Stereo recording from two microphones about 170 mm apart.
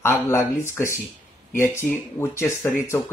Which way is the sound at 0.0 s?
15° left (ahead or behind).